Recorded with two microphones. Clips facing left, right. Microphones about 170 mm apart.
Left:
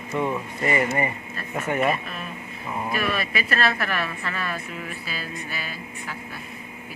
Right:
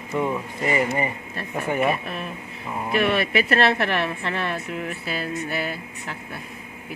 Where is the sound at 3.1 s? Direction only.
65° right (ahead or behind).